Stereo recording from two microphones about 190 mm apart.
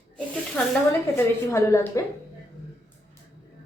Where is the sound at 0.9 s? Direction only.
15° left (ahead or behind).